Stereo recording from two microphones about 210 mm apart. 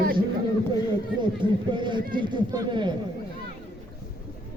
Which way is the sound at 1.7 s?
20° right (ahead or behind).